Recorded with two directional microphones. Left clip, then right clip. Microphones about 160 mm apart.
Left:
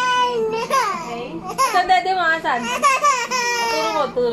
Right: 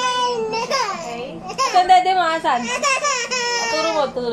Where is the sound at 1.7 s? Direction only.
25° right (ahead or behind).